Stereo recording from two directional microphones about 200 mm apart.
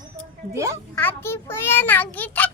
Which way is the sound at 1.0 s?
10° left (ahead or behind).